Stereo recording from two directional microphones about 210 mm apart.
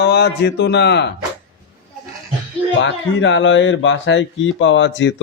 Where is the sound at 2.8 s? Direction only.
60° left (ahead or behind).